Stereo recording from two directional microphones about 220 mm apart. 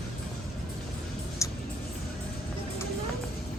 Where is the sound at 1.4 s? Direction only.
15° left (ahead or behind).